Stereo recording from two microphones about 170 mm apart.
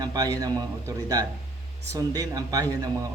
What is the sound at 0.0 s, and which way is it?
Speech, 20° right (ahead or behind).